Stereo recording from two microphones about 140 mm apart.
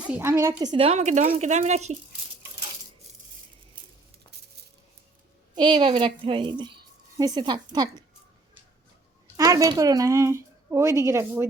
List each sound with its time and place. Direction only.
0.0 s speech: 15° right (ahead or behind)
0.7 s a woman's voice: 45° right (ahead or behind)
5.5 s a woman's voice: 35° right (ahead or behind)
9.4 s speech: 25° right (ahead or behind)